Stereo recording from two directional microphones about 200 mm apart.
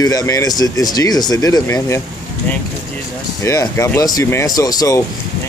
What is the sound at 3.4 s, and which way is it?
Speech, 15° left (ahead or behind).